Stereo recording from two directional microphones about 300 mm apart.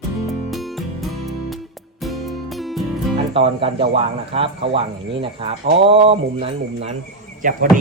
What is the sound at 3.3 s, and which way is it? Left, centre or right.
Speech, centre.